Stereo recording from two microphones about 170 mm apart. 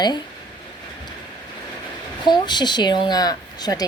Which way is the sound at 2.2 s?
25° left (ahead or behind).